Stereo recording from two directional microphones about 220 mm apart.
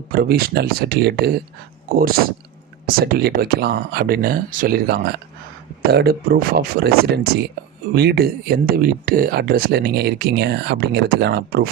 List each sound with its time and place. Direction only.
0.1 s speech: 45° right (ahead or behind)
2.8 s speech: 45° right (ahead or behind)